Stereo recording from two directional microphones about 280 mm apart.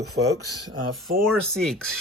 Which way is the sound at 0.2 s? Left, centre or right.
Right.